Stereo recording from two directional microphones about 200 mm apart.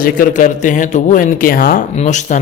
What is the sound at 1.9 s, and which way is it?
Speech, 35° left (ahead or behind).